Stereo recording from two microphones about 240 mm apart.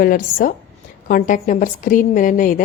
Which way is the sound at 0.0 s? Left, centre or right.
Left.